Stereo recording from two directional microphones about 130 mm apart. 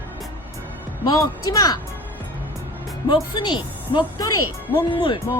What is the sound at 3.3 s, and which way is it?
Speech, 35° left (ahead or behind).